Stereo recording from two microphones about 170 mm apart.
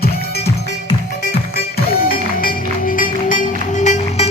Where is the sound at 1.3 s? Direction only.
65° left (ahead or behind).